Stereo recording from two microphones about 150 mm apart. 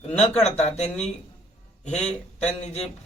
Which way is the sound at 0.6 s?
45° left (ahead or behind).